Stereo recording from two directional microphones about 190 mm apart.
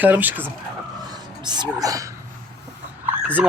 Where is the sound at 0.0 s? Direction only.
10° right (ahead or behind).